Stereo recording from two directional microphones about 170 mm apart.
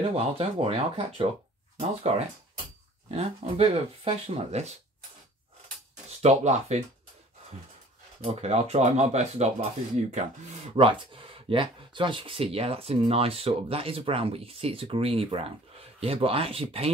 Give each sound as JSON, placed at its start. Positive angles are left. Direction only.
{"t": 0.1, "sound": "speech", "side_deg": -35}
{"t": 3.1, "sound": "speech", "side_deg": -35}
{"t": 6.0, "sound": "speech", "side_deg": -40}
{"t": 8.2, "sound": "speech", "side_deg": -35}
{"t": 10.9, "sound": "speech", "side_deg": -30}